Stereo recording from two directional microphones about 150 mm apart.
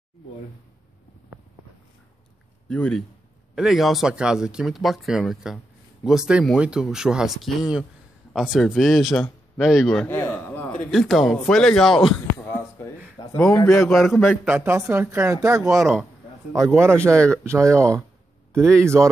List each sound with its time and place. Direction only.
2.7 s speech: 5° left (ahead or behind)
12.4 s a sound: 15° left (ahead or behind)
13.2 s a man's voice: 25° left (ahead or behind)
13.7 s speech: centre (ahead or behind)
14.4 s speech: 10° right (ahead or behind)